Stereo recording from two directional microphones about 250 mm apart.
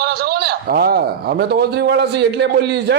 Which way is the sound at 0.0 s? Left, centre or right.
Right.